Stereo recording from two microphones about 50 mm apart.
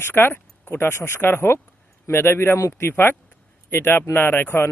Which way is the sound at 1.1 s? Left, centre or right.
Left.